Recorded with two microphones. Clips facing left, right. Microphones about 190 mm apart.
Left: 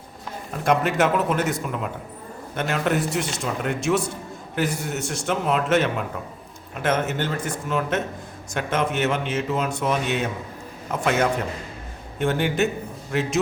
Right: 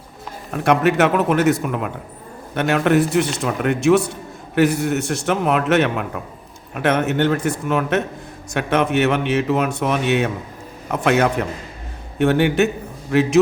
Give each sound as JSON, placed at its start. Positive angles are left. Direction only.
{"t": 0.5, "sound": "speech", "side_deg": -65}
{"t": 12.2, "sound": "a man's voice", "side_deg": -65}